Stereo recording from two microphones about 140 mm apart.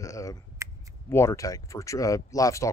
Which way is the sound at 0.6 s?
20° right (ahead or behind).